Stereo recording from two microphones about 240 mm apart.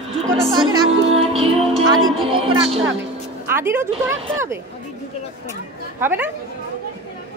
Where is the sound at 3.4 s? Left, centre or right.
Centre.